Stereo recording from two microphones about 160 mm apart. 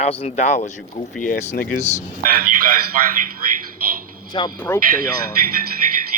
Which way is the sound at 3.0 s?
55° right (ahead or behind).